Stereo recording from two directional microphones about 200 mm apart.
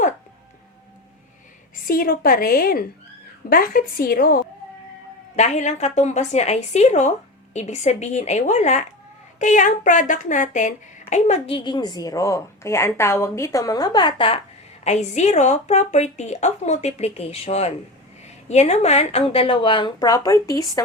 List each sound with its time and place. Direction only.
1.9 s a woman's voice: 45° left (ahead or behind)
5.4 s a woman's voice: 35° left (ahead or behind)
14.8 s a woman's voice: 35° left (ahead or behind); by 20.8 s 15° left (ahead or behind)